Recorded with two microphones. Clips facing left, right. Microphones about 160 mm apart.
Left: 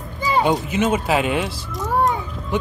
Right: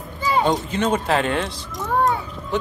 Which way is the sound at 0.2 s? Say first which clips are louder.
Left 1 dB; 5° left (ahead or behind).